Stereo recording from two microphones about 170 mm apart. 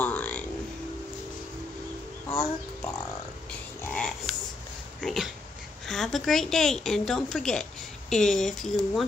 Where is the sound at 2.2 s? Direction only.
15° left (ahead or behind).